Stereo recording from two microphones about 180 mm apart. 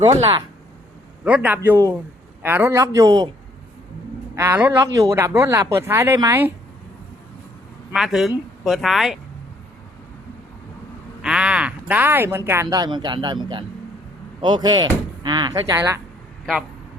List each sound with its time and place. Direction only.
0.0 s speech: 20° right (ahead or behind)
1.2 s speech: 10° right (ahead or behind)
1.7 s speech: 20° right (ahead or behind)
4.4 s speech: 15° right (ahead or behind)
7.9 s speech: centre (ahead or behind)
11.2 s speech: 5° right (ahead or behind)